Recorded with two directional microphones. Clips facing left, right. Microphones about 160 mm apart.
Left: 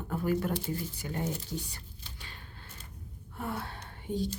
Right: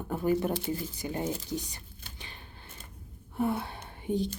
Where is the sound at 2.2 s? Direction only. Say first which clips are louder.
Right 2 dB; 20° right (ahead or behind).